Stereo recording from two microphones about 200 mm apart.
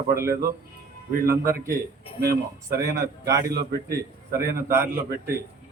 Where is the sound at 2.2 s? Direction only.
50° right (ahead or behind).